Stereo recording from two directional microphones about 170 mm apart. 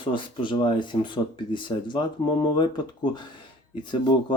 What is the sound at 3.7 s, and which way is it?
Speech, 25° left (ahead or behind).